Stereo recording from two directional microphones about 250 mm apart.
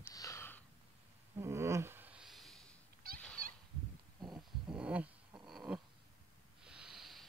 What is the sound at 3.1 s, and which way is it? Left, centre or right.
Goose, right.